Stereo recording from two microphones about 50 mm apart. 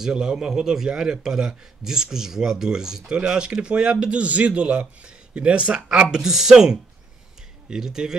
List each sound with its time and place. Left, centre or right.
0.0 s a man's voice: centre
6.1 s a man's voice: centre